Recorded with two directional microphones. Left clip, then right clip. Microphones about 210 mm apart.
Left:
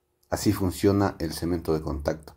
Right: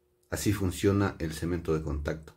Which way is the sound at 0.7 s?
5° left (ahead or behind).